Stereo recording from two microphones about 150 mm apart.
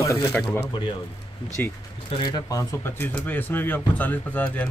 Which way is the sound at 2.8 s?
15° left (ahead or behind).